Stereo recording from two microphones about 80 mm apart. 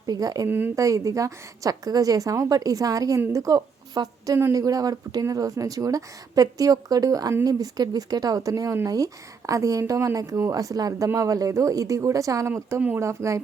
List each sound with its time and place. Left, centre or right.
0.0 s speech: right
0.4 s speech: right
0.8 s a woman's voice: right